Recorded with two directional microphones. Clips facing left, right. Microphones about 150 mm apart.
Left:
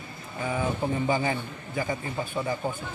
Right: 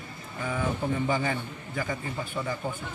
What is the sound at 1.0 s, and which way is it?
A man's voice, 20° left (ahead or behind).